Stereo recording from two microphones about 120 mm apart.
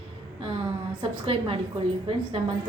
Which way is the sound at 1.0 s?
50° right (ahead or behind).